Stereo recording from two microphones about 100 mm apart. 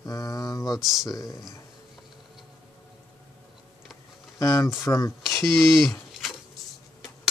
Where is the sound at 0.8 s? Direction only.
5° right (ahead or behind).